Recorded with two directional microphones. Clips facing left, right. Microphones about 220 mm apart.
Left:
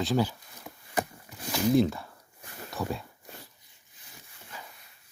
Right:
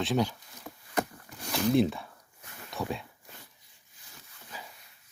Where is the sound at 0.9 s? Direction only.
5° left (ahead or behind).